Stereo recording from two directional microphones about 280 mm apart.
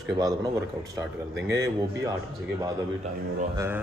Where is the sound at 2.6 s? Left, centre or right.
Right.